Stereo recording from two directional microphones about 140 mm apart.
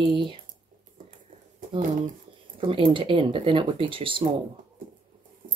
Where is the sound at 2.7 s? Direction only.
40° right (ahead or behind).